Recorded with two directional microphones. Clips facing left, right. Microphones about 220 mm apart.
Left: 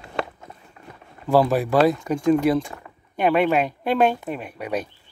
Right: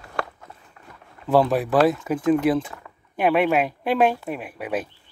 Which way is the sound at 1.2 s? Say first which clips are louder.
Left 1 dB; centre (ahead or behind).